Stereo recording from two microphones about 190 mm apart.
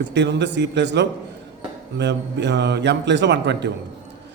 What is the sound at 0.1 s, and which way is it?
A man's voice, 65° right (ahead or behind).